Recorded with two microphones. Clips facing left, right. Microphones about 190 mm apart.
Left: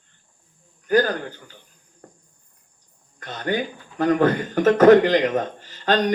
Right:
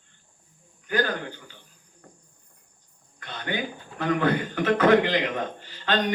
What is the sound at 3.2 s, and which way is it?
A man's voice, 45° left (ahead or behind).